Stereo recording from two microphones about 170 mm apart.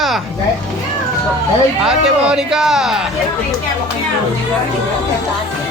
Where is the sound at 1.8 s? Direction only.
5° right (ahead or behind).